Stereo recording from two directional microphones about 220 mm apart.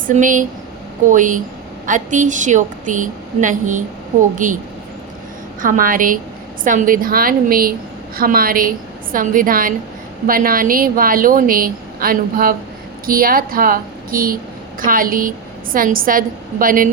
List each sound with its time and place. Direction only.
0.1 s a woman's voice: 35° right (ahead or behind)
5.6 s a woman's voice: 40° right (ahead or behind)